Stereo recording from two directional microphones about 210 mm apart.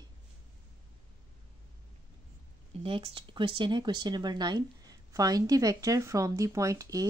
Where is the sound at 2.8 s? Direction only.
25° right (ahead or behind).